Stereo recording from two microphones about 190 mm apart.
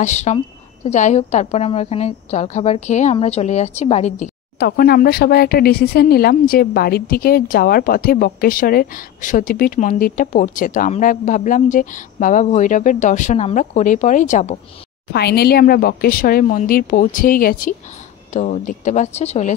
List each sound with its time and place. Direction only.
0.0 s a woman's voice: 40° left (ahead or behind)
4.6 s speech: 55° left (ahead or behind); by 14.6 s 40° left (ahead or behind)
15.1 s a woman's voice: 60° left (ahead or behind); by 19.5 s 35° left (ahead or behind)